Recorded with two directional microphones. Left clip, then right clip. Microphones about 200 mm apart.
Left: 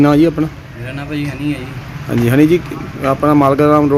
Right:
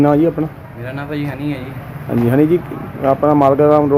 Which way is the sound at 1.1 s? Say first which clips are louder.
Left 3 dB; 5° right (ahead or behind).